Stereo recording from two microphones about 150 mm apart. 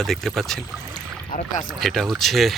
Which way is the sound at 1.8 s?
Centre (ahead or behind).